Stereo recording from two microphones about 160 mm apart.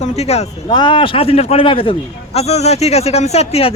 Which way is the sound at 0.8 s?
30° left (ahead or behind).